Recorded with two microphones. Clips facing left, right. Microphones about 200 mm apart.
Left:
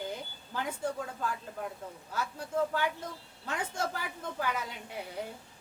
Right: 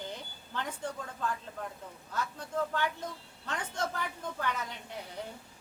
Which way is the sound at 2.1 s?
10° left (ahead or behind).